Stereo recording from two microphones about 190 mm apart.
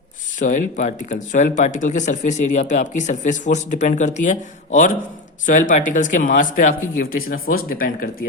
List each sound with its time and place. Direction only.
0.3 s speech: 40° left (ahead or behind)